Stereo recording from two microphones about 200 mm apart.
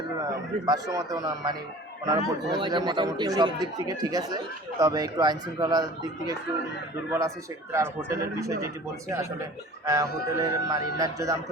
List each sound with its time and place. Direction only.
0.2 s a man's voice: 20° right (ahead or behind)